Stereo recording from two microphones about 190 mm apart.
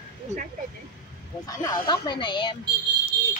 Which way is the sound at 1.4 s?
20° left (ahead or behind).